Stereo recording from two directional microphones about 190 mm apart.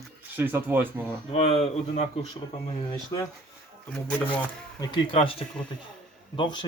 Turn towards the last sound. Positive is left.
turn(degrees=25)  # may be behind; listen again after turning